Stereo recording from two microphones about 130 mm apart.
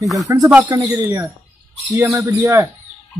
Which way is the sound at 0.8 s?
20° right (ahead or behind).